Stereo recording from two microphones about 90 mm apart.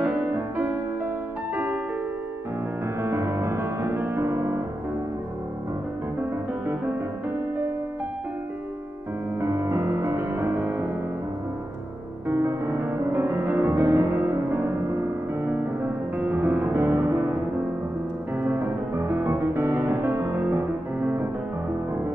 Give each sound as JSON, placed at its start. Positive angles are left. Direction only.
{"t": 0.0, "sound": "music", "side_deg": -15}
{"t": 3.0, "sound": "music", "side_deg": -30}
{"t": 9.4, "sound": "music", "side_deg": -30}
{"t": 12.3, "sound": "music", "side_deg": -25}